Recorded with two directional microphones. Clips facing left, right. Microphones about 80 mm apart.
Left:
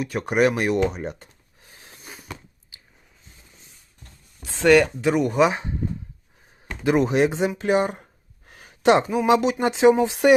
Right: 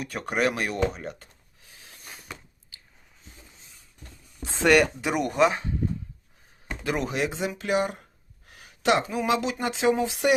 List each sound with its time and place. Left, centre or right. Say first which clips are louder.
0.0 s speech: left 7 dB; centre
0.3 s speech: left 6 dB; centre; by 2.0 s left
2.0 s a sound: left 3 dB; centre
2.7 s a sound: even; centre
4.6 s speech: left 4 dB; centre
5.5 s speech: left 2 dB; left
6.8 s speech: left 9 dB; left